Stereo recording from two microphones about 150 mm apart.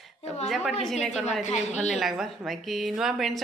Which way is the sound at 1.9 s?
Centre (ahead or behind).